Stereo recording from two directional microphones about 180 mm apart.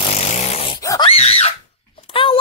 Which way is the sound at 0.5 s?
30° left (ahead or behind).